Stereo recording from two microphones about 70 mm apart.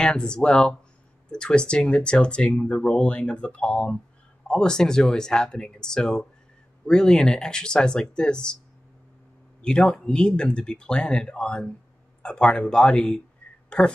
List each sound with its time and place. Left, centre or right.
0.0 s speech: centre
9.6 s speech: centre